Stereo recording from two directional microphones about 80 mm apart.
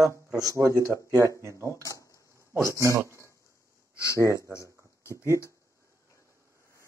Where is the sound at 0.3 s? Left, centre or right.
Right.